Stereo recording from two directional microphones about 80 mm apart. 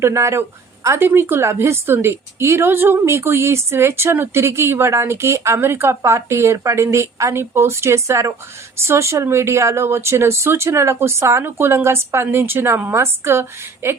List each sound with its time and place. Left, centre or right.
0.0 s speech: right